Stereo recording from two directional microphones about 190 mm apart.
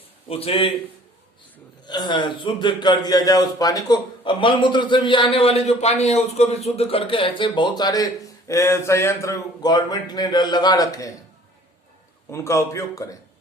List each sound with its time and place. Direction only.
0.3 s a man's voice: 30° left (ahead or behind)
1.9 s a man's voice: 25° left (ahead or behind)
12.3 s a man's voice: 15° left (ahead or behind)